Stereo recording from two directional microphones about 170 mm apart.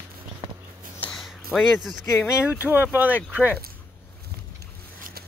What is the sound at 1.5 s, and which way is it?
Speech, centre (ahead or behind).